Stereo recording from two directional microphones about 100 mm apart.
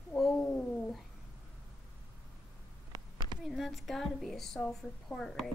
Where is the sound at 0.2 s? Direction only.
10° left (ahead or behind).